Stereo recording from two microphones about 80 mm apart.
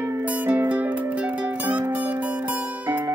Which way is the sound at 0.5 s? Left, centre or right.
Centre.